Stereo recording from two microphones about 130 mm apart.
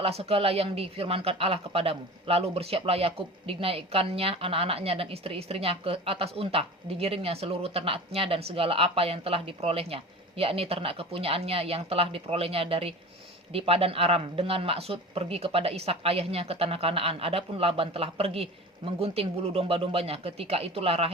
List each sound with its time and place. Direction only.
0.0 s speech: 50° right (ahead or behind)